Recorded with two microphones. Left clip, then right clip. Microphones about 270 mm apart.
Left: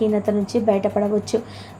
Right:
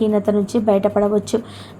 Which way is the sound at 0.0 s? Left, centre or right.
Centre.